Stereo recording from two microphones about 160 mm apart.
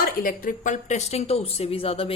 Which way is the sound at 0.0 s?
65° left (ahead or behind).